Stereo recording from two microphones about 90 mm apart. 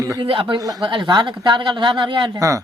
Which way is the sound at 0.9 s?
60° right (ahead or behind).